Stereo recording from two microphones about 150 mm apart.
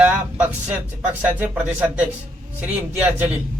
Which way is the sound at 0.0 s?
10° right (ahead or behind).